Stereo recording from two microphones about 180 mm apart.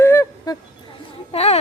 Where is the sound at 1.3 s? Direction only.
35° left (ahead or behind).